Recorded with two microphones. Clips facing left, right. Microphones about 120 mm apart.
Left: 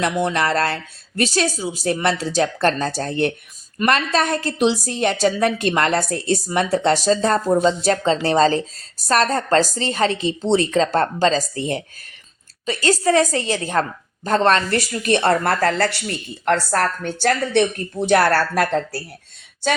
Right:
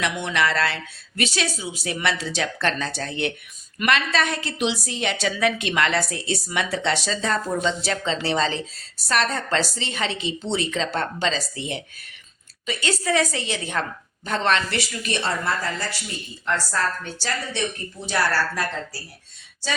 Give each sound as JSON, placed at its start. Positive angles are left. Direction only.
{"t": 0.0, "sound": "a woman's voice", "side_deg": 35}